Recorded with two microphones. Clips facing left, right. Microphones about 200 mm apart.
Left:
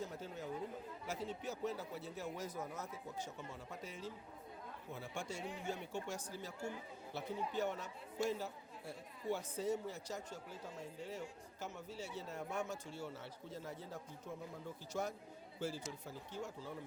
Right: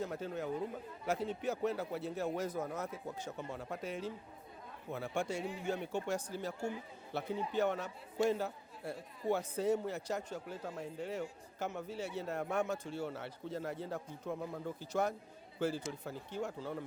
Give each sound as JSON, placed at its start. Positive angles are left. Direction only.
{"t": 0.0, "sound": "a man's voice", "side_deg": -60}